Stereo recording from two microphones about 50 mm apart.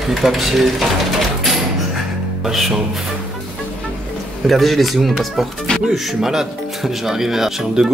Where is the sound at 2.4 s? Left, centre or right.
Centre.